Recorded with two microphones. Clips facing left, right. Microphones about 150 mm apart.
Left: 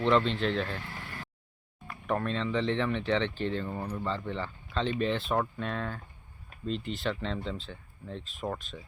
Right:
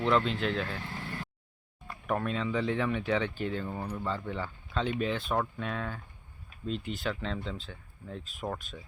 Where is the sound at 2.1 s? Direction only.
5° right (ahead or behind).